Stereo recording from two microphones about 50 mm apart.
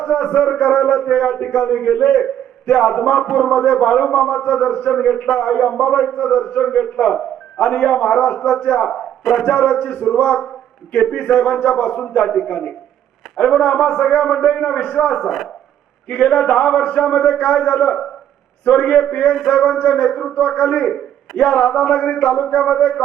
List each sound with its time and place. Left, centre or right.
0.0 s a man's voice: centre
9.2 s speech: centre
9.5 s a man's voice: centre